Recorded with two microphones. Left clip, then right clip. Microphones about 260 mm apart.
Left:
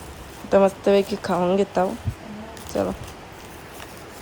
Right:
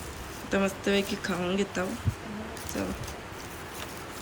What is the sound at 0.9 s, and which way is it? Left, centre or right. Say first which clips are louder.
Speech: left 9 dB; centre.